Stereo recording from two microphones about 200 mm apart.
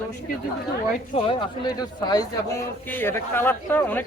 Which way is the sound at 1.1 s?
25° left (ahead or behind).